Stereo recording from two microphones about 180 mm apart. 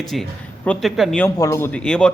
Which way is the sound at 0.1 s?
5° left (ahead or behind).